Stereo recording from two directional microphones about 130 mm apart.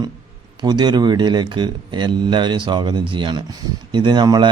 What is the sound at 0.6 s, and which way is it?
Speech, 35° right (ahead or behind).